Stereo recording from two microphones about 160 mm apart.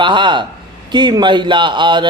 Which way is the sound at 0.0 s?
30° right (ahead or behind).